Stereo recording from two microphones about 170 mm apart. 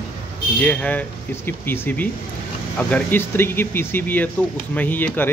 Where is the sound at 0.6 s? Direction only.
10° left (ahead or behind).